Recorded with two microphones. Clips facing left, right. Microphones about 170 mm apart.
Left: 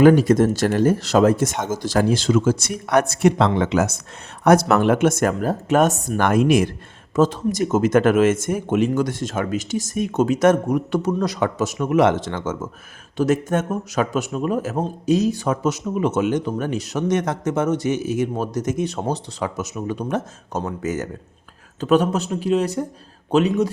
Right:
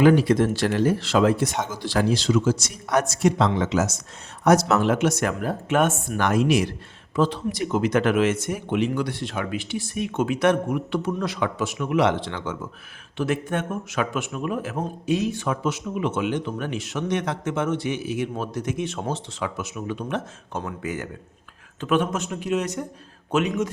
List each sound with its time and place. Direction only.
0.0 s a man's voice: 45° left (ahead or behind)